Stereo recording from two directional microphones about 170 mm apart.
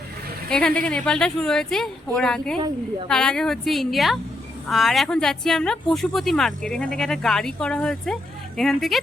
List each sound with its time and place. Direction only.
0.5 s a woman's voice: 5° left (ahead or behind)
2.6 s a woman's voice: 30° right (ahead or behind)
3.1 s a woman's voice: 5° left (ahead or behind)